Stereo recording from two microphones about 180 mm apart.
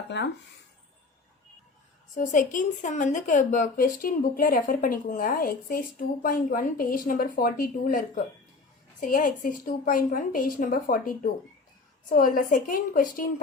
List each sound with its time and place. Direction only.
0.1 s speech: 75° left (ahead or behind)
2.1 s a woman's voice: 45° left (ahead or behind)